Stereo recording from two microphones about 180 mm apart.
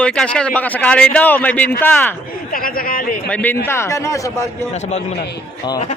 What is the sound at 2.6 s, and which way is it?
Speech, 50° left (ahead or behind).